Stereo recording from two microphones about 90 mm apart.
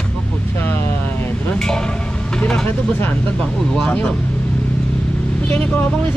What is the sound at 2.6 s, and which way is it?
Speech, 25° left (ahead or behind).